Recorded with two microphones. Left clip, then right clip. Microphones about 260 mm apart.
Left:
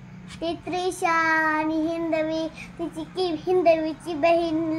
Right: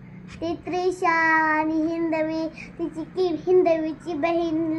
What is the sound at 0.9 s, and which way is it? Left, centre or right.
A child's voice, left.